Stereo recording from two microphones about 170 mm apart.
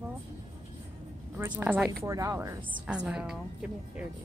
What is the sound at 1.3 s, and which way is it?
Speech, 10° right (ahead or behind).